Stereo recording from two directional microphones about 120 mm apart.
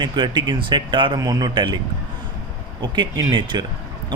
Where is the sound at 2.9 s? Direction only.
35° right (ahead or behind).